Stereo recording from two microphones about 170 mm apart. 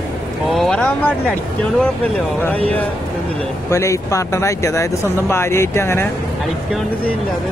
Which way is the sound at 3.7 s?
20° left (ahead or behind).